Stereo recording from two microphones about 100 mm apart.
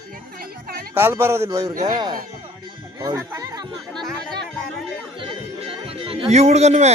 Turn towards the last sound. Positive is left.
turn(degrees=-90)